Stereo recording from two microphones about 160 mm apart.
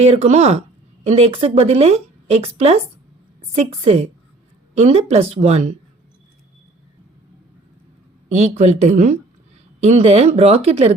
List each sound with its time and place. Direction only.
0.0 s speech: 40° right (ahead or behind)
8.3 s speech: 45° right (ahead or behind)